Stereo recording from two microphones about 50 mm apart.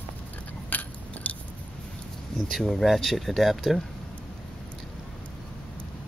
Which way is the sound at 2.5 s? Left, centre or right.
Centre.